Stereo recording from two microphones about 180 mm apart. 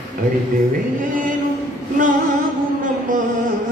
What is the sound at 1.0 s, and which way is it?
Chant, 50° right (ahead or behind).